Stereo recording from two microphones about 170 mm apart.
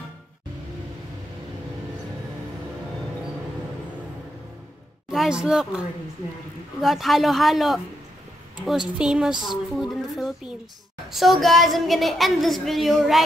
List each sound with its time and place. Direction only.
5.1 s a woman's voice: centre (ahead or behind)
6.8 s a woman's voice: centre (ahead or behind)